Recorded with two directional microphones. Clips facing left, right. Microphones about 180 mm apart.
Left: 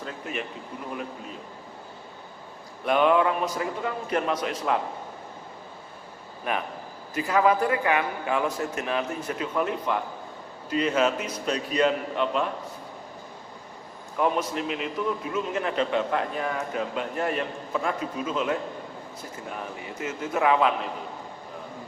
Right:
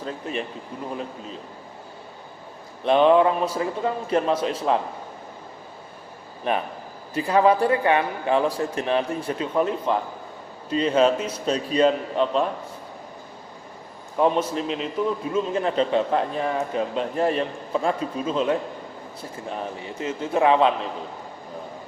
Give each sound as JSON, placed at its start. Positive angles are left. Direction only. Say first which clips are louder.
{"t": 0.0, "sound": "a man's voice", "louder": "right 4 dB", "side_deg": -30}
{"t": 2.8, "sound": "a man's voice", "louder": "right 5 dB", "side_deg": -30}
{"t": 6.5, "sound": "a man's voice", "louder": "right 4 dB", "side_deg": -30}
{"t": 14.2, "sound": "a man's voice", "louder": "right 4 dB", "side_deg": -30}